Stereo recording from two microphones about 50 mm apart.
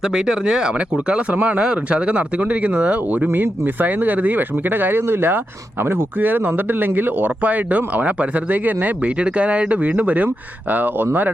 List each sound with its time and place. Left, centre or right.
0.0 s speech: centre; by 11.3 s right